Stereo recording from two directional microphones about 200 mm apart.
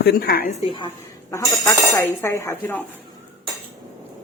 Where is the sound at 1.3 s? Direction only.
15° left (ahead or behind).